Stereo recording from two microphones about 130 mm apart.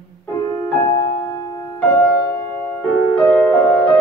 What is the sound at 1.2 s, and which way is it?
Music, 25° left (ahead or behind).